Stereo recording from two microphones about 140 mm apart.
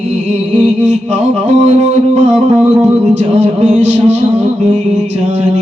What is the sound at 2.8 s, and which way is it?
Music, 55° right (ahead or behind).